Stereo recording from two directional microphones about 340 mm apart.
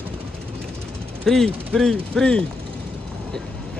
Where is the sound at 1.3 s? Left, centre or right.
Centre.